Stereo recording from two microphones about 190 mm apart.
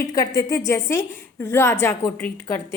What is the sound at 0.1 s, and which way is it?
A woman's voice, 20° left (ahead or behind).